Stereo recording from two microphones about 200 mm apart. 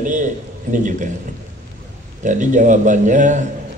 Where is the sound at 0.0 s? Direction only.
40° right (ahead or behind).